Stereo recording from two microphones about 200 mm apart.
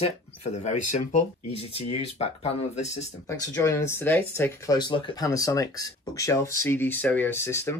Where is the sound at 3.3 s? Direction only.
15° left (ahead or behind).